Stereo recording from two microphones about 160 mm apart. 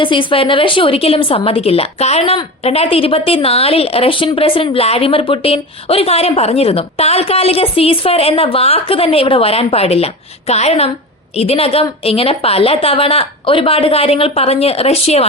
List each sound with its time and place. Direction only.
0.0 s a woman's voice: 30° left (ahead or behind)